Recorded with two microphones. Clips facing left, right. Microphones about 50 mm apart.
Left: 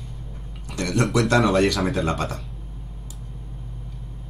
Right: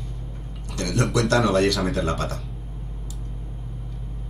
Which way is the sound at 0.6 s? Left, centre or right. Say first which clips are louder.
Left 2 dB; centre.